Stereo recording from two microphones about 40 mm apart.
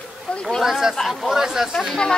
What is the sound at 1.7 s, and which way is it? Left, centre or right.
Speech, centre.